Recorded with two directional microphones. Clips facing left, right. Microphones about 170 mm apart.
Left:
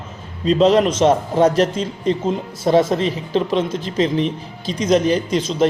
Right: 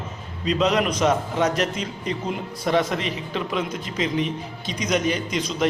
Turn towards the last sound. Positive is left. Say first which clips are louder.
# left 6 dB
turn(degrees=30)  # may be behind; listen again after turning